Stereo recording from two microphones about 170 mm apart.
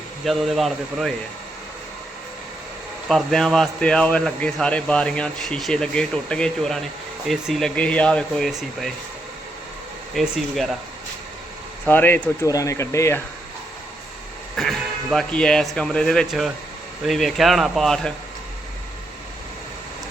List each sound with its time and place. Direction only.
0.3 s speech: centre (ahead or behind)
3.1 s speech: centre (ahead or behind)
10.2 s speech: centre (ahead or behind)
11.9 s speech: 10° left (ahead or behind)
14.5 s speech: centre (ahead or behind)